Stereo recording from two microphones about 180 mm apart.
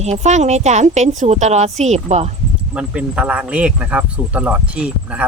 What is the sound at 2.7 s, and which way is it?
Speech, 5° right (ahead or behind).